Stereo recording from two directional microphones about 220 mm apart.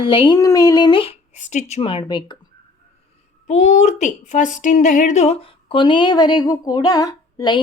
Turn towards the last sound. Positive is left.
turn(degrees=20)  # may be behind; listen again after turning